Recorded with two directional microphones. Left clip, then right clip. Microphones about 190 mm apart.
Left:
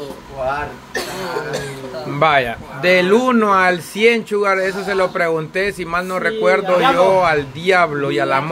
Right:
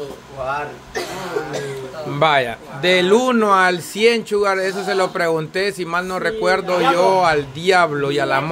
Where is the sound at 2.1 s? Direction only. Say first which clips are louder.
Left 1 dB; 10° right (ahead or behind).